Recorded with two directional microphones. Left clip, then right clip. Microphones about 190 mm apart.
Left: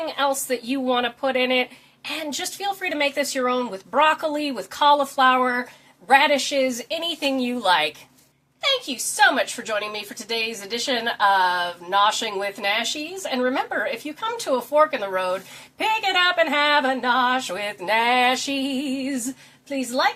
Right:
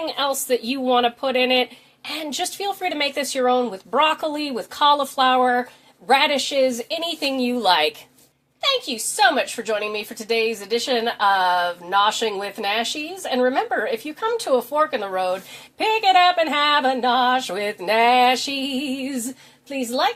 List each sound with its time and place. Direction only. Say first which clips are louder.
0.0 s a woman's voice: even; 40° right (ahead or behind)
6.1 s music: left 1 dB; 40° right (ahead or behind)
9.1 s a woman's voice: even; 40° right (ahead or behind)
17.0 s music: right 2 dB; 40° right (ahead or behind)